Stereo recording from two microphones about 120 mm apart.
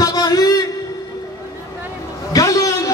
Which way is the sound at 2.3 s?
30° left (ahead or behind).